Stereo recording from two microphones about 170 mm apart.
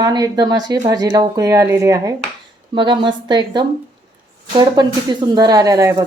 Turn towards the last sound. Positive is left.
turn(degrees=-20)  # may be behind; listen again after turning